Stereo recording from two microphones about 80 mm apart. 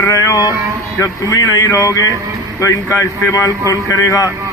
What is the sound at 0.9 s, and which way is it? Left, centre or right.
Speech, left.